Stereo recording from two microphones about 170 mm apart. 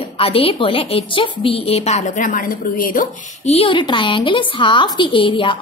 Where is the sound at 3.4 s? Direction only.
35° left (ahead or behind).